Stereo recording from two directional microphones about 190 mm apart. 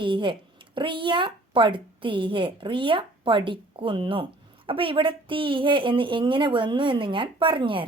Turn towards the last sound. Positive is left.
turn(degrees=-25)  # may be behind; listen again after turning